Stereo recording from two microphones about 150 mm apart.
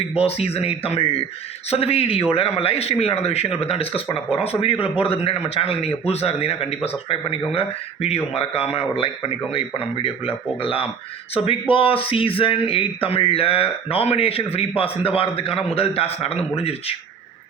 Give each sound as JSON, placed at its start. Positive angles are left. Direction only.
{"t": 0.2, "sound": "speech", "side_deg": 40}